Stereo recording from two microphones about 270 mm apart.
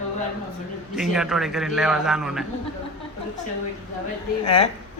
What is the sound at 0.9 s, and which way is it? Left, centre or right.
A man's voice, centre.